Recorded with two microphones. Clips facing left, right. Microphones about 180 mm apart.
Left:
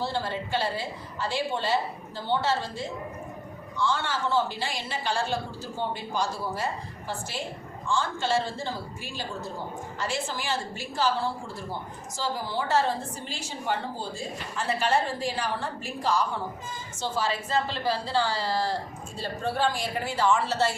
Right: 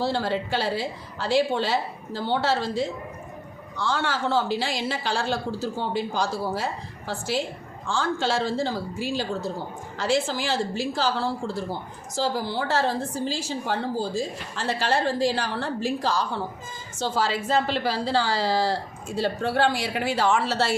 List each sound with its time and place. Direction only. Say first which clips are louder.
0.0 s a woman's voice: right 5 dB; 90° right
3.8 s a woman's voice: right 2 dB; 90° right